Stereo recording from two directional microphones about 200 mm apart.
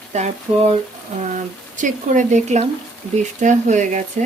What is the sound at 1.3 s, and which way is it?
Speech, 40° right (ahead or behind).